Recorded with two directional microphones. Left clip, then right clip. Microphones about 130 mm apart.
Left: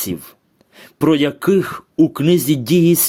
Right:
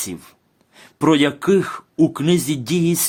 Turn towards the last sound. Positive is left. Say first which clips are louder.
# left 6 dB
turn(degrees=25)  # may be behind; listen again after turning